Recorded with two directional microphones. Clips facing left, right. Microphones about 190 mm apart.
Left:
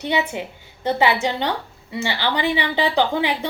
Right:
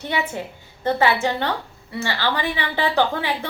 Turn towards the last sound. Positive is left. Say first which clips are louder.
# left 1 dB
turn(degrees=15)  # may be behind; listen again after turning